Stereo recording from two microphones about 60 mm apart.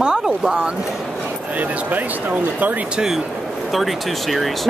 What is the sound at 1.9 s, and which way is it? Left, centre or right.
Speech, right.